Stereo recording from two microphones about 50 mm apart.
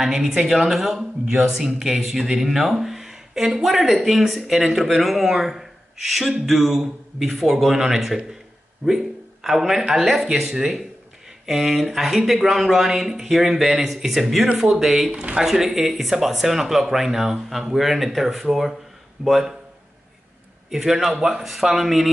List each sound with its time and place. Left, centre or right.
0.0 s speech: centre
15.0 s speech: centre
20.7 s speech: centre